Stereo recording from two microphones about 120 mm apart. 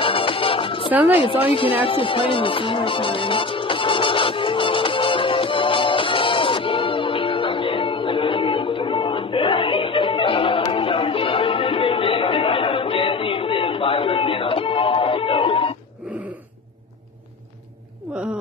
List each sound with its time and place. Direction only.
0.0 s music: 45° left (ahead or behind)